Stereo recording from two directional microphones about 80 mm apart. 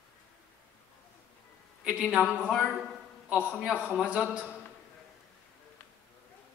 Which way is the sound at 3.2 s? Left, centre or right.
Centre.